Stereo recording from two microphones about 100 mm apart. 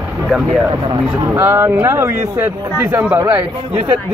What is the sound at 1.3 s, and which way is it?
A man's voice, 20° right (ahead or behind).